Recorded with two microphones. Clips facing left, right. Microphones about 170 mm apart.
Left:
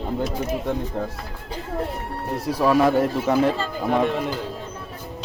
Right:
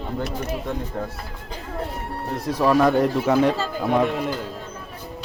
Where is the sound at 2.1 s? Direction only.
5° left (ahead or behind).